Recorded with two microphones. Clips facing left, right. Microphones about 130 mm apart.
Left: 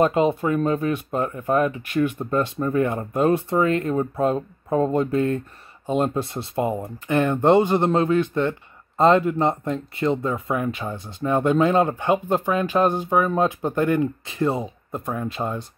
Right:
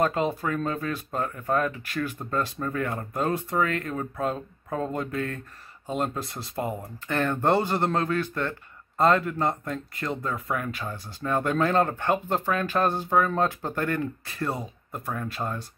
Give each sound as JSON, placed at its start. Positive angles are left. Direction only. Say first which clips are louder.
{"t": 0.0, "sound": "speech", "louder": "left 6 dB", "side_deg": 20}